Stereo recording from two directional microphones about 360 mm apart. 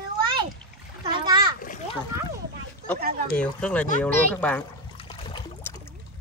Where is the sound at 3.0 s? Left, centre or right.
Right.